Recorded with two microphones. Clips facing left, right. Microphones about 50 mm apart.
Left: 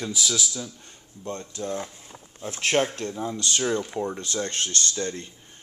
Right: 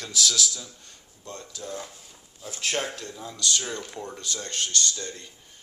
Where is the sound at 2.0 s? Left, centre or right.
Left.